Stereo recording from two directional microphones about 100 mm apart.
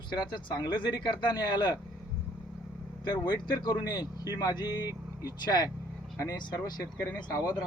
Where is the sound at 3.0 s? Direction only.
45° left (ahead or behind).